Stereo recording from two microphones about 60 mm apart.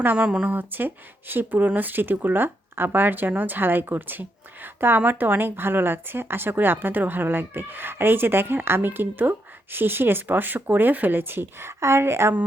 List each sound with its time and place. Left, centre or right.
0.2 s speech: centre
0.5 s speech: right